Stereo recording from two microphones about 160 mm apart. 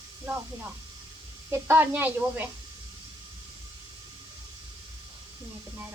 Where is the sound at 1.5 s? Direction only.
15° right (ahead or behind).